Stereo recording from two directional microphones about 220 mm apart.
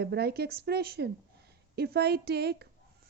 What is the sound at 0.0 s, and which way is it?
A woman's voice, 45° right (ahead or behind).